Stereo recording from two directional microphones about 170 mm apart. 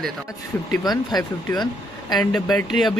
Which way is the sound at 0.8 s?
25° left (ahead or behind).